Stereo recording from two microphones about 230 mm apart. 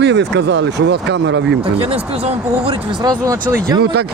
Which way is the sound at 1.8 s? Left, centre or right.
Right.